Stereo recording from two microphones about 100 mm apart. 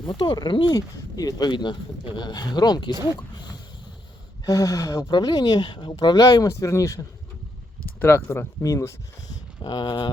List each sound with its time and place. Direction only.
0.1 s speech: 45° left (ahead or behind)
4.4 s speech: 35° left (ahead or behind)
8.0 s speech: 25° left (ahead or behind)
9.6 s speech: 45° left (ahead or behind)